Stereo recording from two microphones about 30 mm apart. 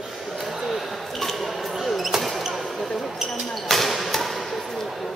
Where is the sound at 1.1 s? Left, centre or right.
Centre.